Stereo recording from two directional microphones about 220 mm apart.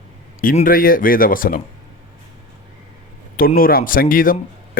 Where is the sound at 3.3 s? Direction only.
40° left (ahead or behind).